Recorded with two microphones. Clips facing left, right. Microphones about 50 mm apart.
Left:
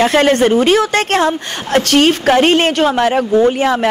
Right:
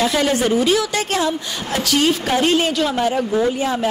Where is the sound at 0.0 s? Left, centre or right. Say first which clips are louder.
Left 7 dB; left.